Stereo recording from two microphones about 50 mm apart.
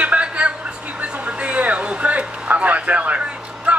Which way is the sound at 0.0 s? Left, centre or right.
Right.